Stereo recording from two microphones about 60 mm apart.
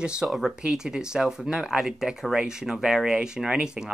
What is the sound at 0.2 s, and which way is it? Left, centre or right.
Speech, right.